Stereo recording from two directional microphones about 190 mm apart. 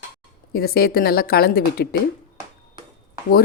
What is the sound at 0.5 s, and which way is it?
Speech, 55° left (ahead or behind).